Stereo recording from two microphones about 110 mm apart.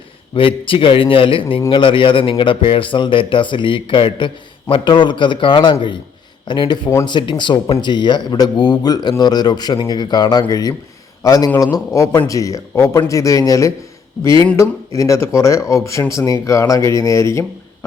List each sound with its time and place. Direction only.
0.3 s speech: 50° left (ahead or behind); by 17.4 s 25° left (ahead or behind)